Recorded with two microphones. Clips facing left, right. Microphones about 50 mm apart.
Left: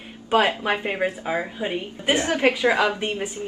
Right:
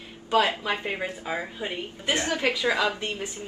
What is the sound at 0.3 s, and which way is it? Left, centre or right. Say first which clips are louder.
A woman's voice: left 3 dB; left.